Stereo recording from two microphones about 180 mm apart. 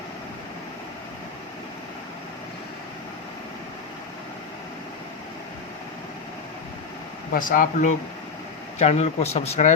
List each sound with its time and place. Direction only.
7.3 s speech: 50° left (ahead or behind)
8.8 s speech: 35° left (ahead or behind)